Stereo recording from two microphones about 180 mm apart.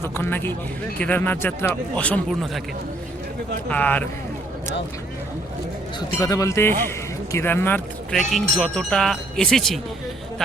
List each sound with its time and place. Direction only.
0.2 s speech: 10° left (ahead or behind)
3.7 s speech: 10° left (ahead or behind)
6.0 s speech: 20° left (ahead or behind); by 9.8 s centre (ahead or behind)